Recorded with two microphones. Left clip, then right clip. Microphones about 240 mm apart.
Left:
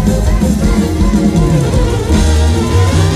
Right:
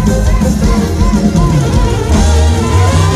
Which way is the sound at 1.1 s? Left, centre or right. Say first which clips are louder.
Even; right.